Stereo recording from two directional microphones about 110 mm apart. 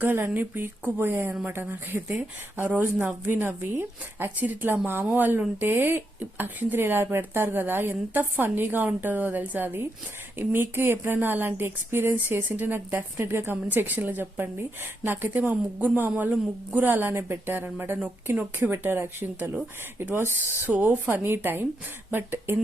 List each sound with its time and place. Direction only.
0.0 s speech: 20° right (ahead or behind)